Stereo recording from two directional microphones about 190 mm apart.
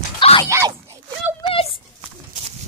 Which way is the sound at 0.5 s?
15° right (ahead or behind).